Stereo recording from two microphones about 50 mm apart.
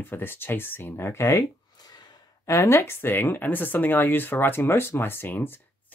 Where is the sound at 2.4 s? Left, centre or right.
Left.